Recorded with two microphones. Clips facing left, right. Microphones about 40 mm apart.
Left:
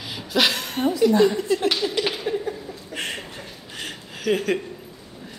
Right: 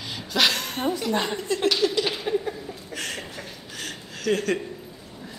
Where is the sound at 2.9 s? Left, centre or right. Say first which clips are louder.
Left 3 dB; left.